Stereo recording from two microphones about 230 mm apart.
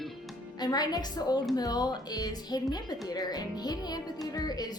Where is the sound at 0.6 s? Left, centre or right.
Centre.